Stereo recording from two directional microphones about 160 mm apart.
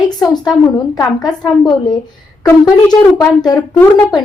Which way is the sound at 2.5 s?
25° left (ahead or behind).